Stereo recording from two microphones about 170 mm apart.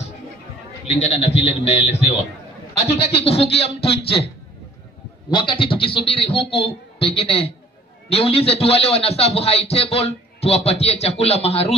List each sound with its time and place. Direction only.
0.8 s a man's voice: 40° left (ahead or behind)
5.3 s a man's voice: 30° left (ahead or behind)